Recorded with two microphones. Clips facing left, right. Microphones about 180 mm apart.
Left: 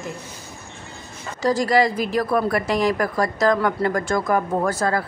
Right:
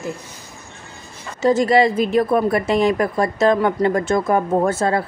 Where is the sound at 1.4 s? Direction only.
25° right (ahead or behind).